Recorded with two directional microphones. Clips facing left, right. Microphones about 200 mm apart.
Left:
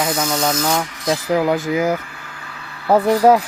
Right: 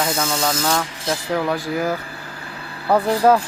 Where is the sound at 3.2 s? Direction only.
15° left (ahead or behind).